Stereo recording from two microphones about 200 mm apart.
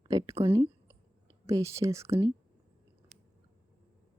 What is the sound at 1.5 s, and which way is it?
Speech, 15° right (ahead or behind).